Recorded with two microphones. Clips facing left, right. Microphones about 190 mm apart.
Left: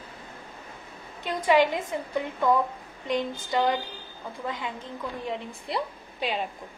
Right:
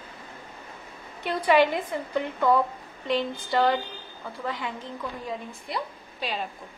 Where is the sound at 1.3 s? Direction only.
15° left (ahead or behind).